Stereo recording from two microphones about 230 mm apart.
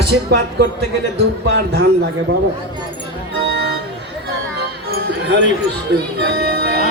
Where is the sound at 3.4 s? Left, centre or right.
Right.